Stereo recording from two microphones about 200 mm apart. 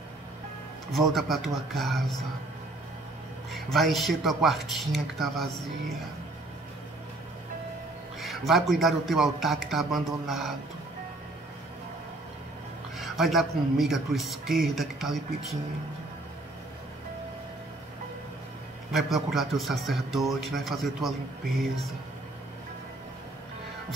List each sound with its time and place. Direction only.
0.9 s a man's voice: centre (ahead or behind)
3.5 s a man's voice: centre (ahead or behind)
8.2 s a man's voice: centre (ahead or behind)
12.9 s a man's voice: centre (ahead or behind)
18.9 s a man's voice: centre (ahead or behind)